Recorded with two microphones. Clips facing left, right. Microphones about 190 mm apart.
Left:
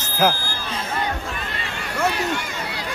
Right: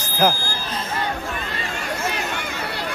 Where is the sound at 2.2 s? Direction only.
60° right (ahead or behind).